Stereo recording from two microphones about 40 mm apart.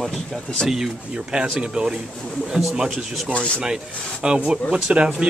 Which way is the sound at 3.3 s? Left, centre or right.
Left.